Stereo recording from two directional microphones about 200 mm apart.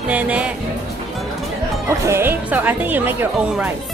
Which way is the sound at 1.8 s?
15° right (ahead or behind).